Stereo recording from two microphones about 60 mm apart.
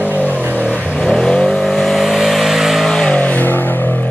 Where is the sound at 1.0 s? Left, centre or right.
Centre.